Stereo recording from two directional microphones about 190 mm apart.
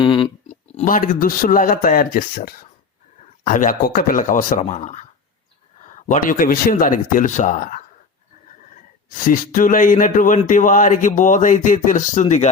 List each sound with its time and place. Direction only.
0.0 s a sound: 25° left (ahead or behind)
0.4 s speech: 35° left (ahead or behind)
9.2 s speech: 45° left (ahead or behind)